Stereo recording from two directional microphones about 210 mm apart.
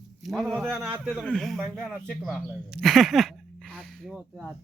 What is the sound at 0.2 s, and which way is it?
Speech, centre (ahead or behind).